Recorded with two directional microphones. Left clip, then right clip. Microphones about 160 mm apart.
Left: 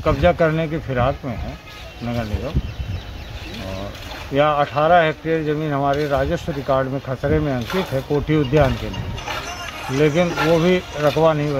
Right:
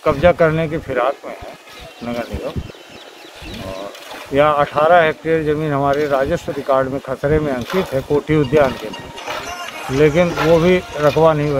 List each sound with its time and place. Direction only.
0.0 s speech: 10° right (ahead or behind)
4.3 s speech: 10° right (ahead or behind)
9.3 s a sound: 30° right (ahead or behind)
9.9 s speech: 10° right (ahead or behind)
10.3 s speech: 40° right (ahead or behind)
11.0 s speech: 10° right (ahead or behind)